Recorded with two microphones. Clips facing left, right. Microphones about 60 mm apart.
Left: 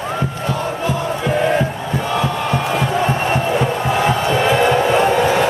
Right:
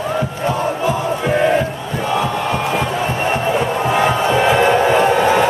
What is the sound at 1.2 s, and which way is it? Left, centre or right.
Crowd, centre.